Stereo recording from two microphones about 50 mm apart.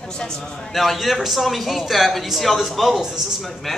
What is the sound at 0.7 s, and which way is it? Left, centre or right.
A man's voice, centre.